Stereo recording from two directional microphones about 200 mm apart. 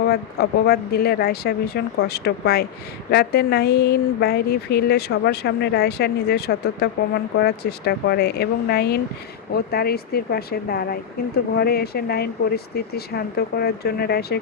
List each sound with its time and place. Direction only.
0.1 s a woman's voice: 50° left (ahead or behind)